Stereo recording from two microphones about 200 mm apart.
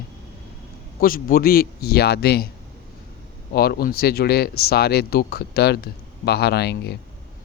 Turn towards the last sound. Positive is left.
turn(degrees=55)  # may be behind; listen again after turning